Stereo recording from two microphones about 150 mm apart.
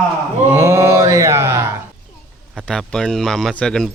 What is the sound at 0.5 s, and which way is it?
Mantra, 20° right (ahead or behind).